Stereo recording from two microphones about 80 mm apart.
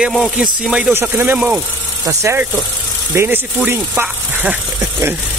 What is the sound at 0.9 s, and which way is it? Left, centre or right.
Speech, right.